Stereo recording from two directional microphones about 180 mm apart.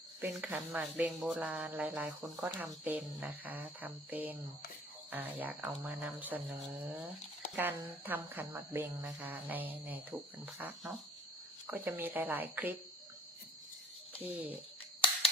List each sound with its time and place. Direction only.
0.2 s speech: 5° right (ahead or behind)
7.5 s speech: 10° right (ahead or behind)
15.0 s a sound: 30° left (ahead or behind)